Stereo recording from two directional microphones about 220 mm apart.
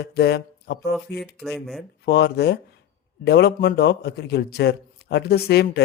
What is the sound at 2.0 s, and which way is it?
Speech, 50° left (ahead or behind).